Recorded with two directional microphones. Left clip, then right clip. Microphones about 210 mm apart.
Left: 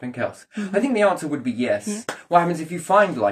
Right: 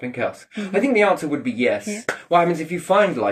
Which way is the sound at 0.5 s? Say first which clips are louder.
Right 3 dB; 20° left (ahead or behind).